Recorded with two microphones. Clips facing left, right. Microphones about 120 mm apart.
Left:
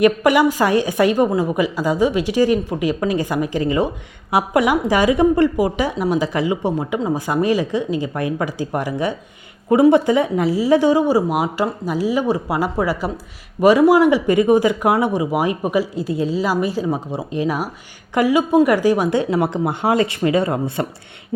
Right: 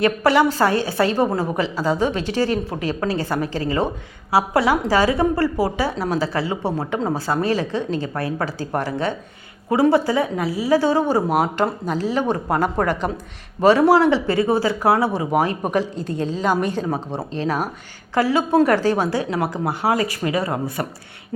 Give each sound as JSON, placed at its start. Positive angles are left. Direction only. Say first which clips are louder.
{"t": 0.0, "sound": "a woman's voice", "louder": "left 3 dB", "side_deg": 15}